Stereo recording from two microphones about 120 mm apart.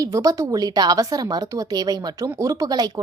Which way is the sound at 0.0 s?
30° right (ahead or behind).